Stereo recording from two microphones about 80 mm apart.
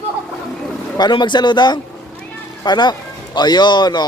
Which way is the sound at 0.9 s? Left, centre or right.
Left.